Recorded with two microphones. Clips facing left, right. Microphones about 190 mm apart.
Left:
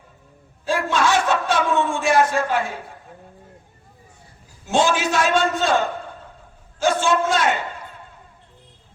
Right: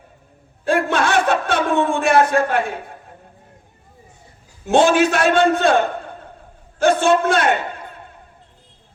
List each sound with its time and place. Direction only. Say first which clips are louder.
0.6 s a man's voice: right 3 dB; 60° right (ahead or behind)
4.6 s a man's voice: right 6 dB; 60° right (ahead or behind)